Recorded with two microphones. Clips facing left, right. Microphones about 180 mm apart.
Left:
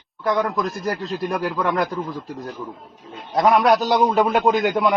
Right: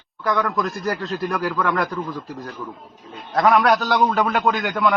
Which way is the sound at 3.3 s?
Centre (ahead or behind).